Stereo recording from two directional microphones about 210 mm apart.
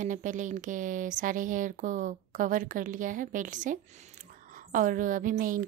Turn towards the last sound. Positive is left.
turn(degrees=-40)  # may be behind; listen again after turning